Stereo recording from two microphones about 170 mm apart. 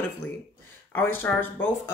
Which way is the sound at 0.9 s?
10° left (ahead or behind).